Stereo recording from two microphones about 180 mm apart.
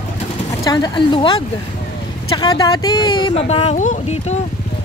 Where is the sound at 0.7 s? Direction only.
25° left (ahead or behind).